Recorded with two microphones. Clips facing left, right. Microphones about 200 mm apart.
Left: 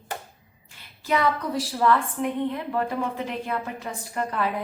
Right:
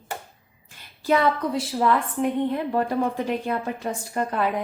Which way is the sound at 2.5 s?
35° right (ahead or behind).